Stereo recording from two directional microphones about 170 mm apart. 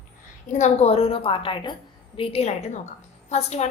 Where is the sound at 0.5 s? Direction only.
40° left (ahead or behind).